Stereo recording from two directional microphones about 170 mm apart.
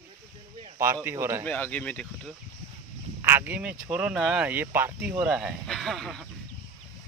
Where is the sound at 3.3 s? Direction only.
10° right (ahead or behind).